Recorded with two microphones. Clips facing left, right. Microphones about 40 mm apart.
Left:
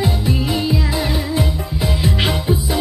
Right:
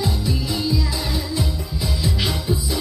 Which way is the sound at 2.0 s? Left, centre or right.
Left.